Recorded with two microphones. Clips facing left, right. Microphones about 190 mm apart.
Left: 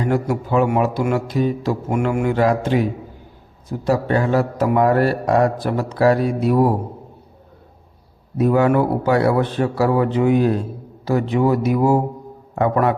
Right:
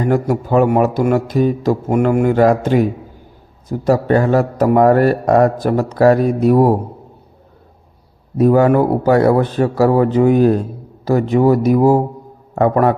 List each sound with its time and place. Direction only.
0.0 s a man's voice: 45° right (ahead or behind)
3.7 s a man's voice: 40° right (ahead or behind)
8.4 s a man's voice: 40° right (ahead or behind)